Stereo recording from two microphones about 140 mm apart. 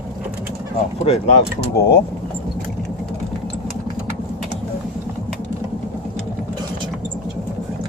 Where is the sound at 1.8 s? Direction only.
90° left.